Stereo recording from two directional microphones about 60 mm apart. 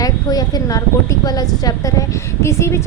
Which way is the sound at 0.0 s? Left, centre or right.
Left.